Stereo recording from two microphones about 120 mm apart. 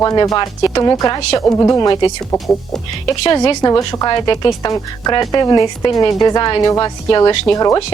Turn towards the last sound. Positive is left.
turn(degrees=30)  # may be behind; listen again after turning